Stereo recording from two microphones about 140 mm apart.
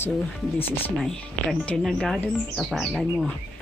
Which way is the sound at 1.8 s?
Centre (ahead or behind).